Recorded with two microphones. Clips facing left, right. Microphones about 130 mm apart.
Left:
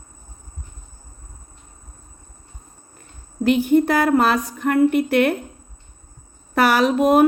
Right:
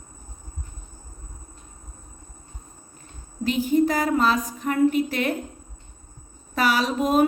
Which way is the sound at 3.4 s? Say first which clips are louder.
Left 5 dB; 65° left (ahead or behind).